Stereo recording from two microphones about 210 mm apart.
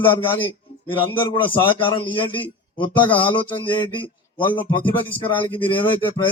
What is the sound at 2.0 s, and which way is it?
Speech, 25° left (ahead or behind).